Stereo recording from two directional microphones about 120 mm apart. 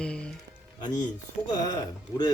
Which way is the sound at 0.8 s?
35° left (ahead or behind).